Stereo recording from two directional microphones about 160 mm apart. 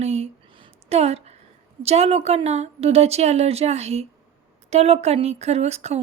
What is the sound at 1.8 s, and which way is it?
Speech, 40° right (ahead or behind).